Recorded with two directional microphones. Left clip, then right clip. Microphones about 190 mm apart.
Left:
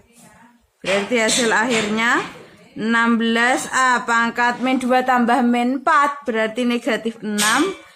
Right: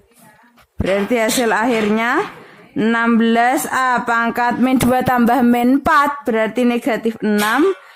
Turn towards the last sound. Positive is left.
turn(degrees=-40)  # may be behind; listen again after turning